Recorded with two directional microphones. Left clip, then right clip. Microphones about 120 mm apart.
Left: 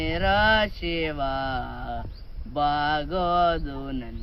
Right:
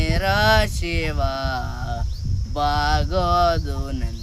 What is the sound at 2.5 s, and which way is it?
Speech, 25° right (ahead or behind).